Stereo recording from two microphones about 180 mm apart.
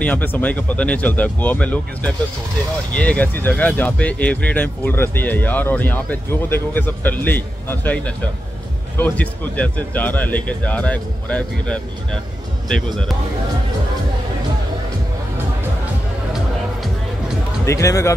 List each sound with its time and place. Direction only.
0.0 s speech: 10° left (ahead or behind)
17.6 s speech: 15° left (ahead or behind)